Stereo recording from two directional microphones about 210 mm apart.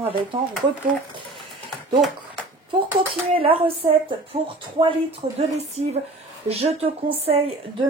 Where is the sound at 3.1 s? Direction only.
25° right (ahead or behind).